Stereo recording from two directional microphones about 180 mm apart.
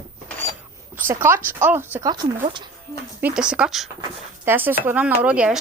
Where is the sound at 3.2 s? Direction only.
5° right (ahead or behind).